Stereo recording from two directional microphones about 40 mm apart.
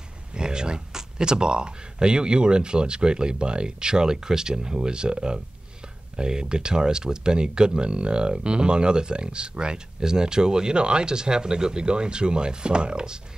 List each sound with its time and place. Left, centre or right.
0.3 s speech: centre